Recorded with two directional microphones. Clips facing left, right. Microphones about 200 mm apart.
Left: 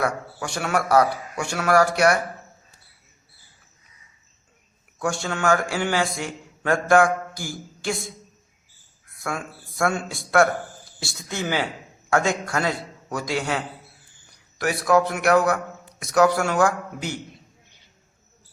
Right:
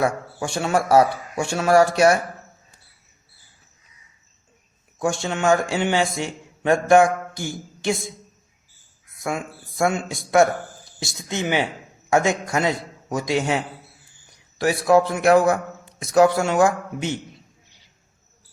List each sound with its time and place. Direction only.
0.0 s a man's voice: 25° right (ahead or behind)
4.9 s a man's voice: 20° right (ahead or behind)
9.1 s a man's voice: 20° right (ahead or behind)